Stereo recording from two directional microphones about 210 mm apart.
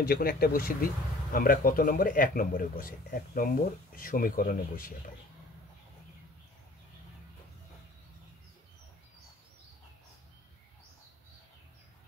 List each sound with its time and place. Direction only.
0.0 s speech: 45° left (ahead or behind)